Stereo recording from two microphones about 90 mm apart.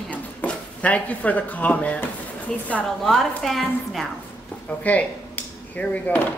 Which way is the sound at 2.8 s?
5° left (ahead or behind).